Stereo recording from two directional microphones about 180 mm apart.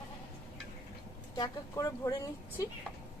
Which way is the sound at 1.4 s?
20° left (ahead or behind).